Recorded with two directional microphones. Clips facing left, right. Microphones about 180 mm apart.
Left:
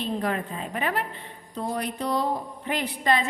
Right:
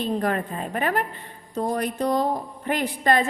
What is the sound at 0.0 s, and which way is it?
A woman's voice, 45° right (ahead or behind).